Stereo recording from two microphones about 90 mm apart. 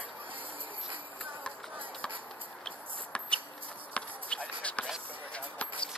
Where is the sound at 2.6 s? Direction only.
10° left (ahead or behind).